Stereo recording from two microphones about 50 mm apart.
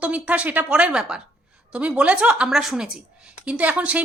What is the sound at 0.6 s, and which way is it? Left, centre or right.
Speech, centre.